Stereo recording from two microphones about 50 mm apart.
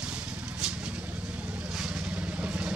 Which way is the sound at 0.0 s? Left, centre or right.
Centre.